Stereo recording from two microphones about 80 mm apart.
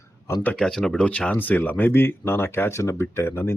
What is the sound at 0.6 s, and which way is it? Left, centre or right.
Speech, centre.